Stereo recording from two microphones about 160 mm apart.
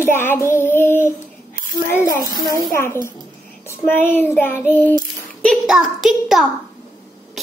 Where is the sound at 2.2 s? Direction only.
25° right (ahead or behind).